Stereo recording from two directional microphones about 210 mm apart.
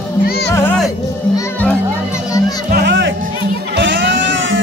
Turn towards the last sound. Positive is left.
turn(degrees=-55)  # may be behind; listen again after turning